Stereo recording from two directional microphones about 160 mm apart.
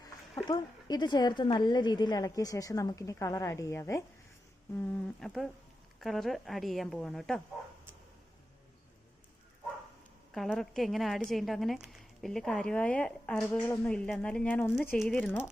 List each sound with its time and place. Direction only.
0.4 s a woman's voice: 25° left (ahead or behind)
4.8 s a woman's voice: centre (ahead or behind)
10.3 s a woman's voice: centre (ahead or behind)